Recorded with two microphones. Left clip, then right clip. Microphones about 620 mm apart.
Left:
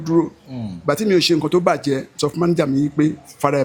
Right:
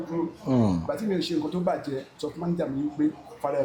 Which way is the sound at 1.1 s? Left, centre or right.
Left.